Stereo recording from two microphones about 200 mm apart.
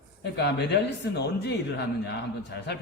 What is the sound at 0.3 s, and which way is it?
Speech, 60° left (ahead or behind).